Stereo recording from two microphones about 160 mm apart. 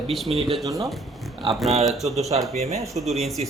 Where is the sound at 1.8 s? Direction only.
Centre (ahead or behind).